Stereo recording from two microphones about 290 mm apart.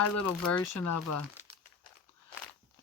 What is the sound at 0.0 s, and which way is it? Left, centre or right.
Speech, left.